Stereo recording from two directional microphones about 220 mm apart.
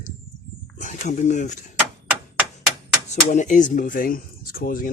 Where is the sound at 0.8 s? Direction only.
35° left (ahead or behind).